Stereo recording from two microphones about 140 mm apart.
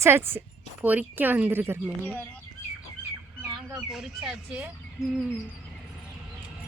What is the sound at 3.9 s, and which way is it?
A woman's voice, centre (ahead or behind).